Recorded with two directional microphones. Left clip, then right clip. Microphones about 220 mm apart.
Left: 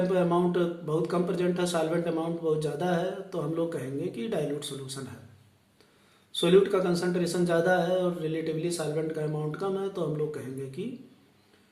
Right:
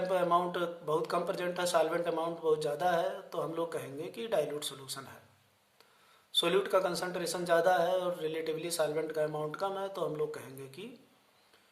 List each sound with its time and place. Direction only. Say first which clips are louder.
0.1 s speech: left 3 dB; 25° right (ahead or behind)
6.3 s speech: left 6 dB; 30° right (ahead or behind)